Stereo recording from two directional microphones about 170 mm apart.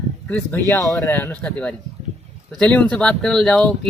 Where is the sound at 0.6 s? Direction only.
20° left (ahead or behind).